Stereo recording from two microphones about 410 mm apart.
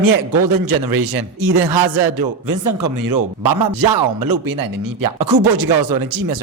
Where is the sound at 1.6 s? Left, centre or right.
Centre.